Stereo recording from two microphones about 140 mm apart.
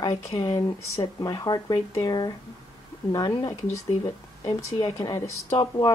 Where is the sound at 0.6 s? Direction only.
25° left (ahead or behind).